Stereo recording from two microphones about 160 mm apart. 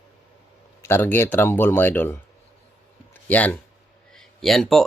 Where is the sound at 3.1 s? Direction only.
10° left (ahead or behind).